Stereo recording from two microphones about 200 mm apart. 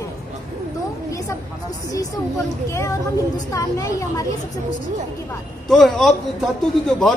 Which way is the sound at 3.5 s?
15° left (ahead or behind).